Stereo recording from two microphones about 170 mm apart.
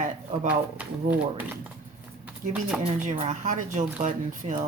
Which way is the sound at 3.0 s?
50° right (ahead or behind).